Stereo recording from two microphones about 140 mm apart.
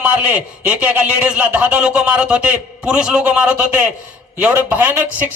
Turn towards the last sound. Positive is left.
turn(degrees=-10)  # may be behind; listen again after turning